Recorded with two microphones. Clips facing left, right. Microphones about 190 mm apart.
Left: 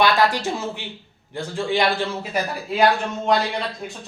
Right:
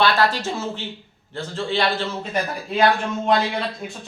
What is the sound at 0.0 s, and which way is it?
A man's voice, 15° left (ahead or behind).